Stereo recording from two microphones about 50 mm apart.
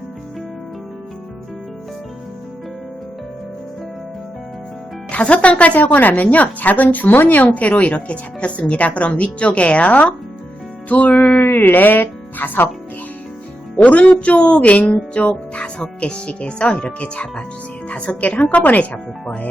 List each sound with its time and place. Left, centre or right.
5.1 s a woman's voice: left
13.8 s a woman's voice: left
15.1 s music: left
16.0 s a woman's voice: left